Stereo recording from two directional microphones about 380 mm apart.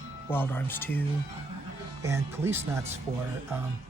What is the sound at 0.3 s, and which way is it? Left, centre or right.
Speech, centre.